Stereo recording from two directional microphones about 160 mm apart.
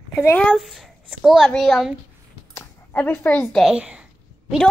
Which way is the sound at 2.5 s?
10° left (ahead or behind).